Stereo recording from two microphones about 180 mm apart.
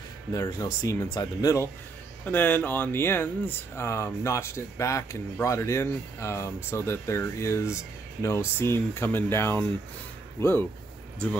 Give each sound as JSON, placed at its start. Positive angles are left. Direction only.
{"t": 0.3, "sound": "speech", "side_deg": 20}